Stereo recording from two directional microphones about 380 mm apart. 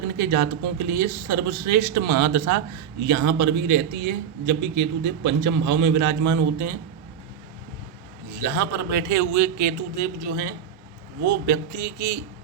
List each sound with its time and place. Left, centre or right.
0.2 s a man's voice: right
8.5 s a man's voice: right
11.8 s speech: right